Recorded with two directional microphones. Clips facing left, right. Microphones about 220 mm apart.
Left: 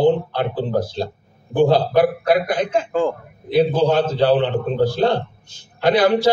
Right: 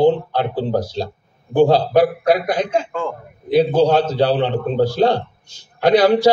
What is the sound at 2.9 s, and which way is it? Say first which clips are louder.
Speech: left 5 dB; 35° left (ahead or behind).